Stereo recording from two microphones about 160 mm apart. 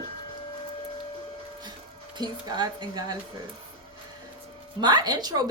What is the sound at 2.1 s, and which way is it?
A woman's voice, 25° right (ahead or behind).